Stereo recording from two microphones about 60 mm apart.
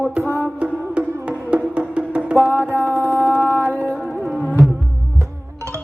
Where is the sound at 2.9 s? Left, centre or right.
Left.